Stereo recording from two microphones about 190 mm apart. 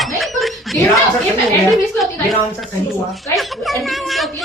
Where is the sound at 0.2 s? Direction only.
Centre (ahead or behind).